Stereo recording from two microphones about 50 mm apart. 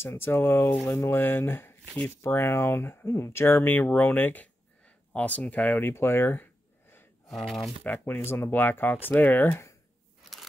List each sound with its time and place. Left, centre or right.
0.0 s speech: left
3.6 s speech: left
7.2 s speech: centre
7.8 s speech: left
8.2 s speech: left
8.5 s speech: left